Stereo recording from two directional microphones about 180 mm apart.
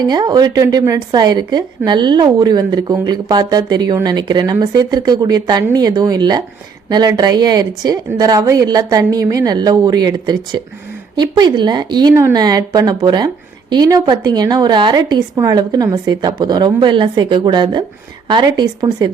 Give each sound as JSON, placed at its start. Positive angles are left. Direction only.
{"t": 0.0, "sound": "a woman's voice", "side_deg": -25}